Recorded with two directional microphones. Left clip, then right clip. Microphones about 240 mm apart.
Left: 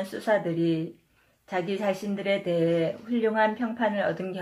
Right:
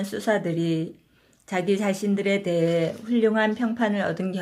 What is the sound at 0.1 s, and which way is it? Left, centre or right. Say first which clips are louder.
Speech: right 2 dB; right.